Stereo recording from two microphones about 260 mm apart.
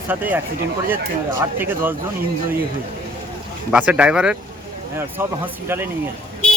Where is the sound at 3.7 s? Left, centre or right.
Centre.